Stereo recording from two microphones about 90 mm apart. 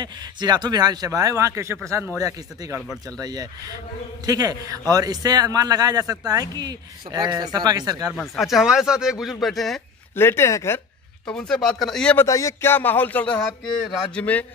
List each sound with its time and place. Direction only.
0.0 s speech: 55° right (ahead or behind)
8.1 s speech: centre (ahead or behind)
10.1 s speech: 25° left (ahead or behind)
11.2 s speech: 10° left (ahead or behind)
12.3 s speech: 35° left (ahead or behind)
12.7 s speech: 20° left (ahead or behind)